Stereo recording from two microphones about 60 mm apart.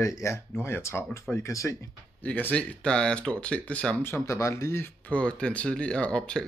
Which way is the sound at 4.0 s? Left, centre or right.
Left.